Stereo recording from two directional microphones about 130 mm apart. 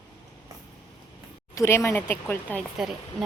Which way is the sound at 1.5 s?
20° left (ahead or behind).